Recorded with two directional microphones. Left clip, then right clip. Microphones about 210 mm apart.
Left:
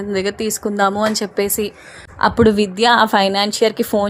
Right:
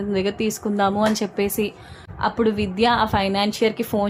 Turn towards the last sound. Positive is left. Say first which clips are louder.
# left 5 dB
turn(degrees=30)  # may be behind; listen again after turning